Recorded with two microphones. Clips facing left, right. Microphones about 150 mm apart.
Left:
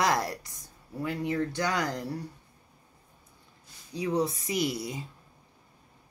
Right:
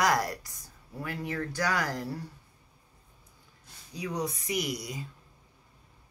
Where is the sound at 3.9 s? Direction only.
30° left (ahead or behind).